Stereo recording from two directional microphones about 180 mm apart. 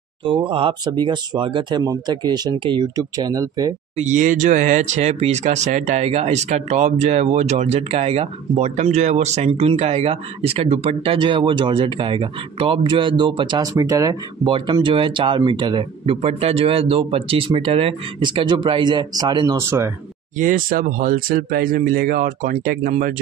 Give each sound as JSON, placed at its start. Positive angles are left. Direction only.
{"t": 0.2, "sound": "speech", "side_deg": -25}
{"t": 3.9, "sound": "speech", "side_deg": -40}
{"t": 20.3, "sound": "speech", "side_deg": -50}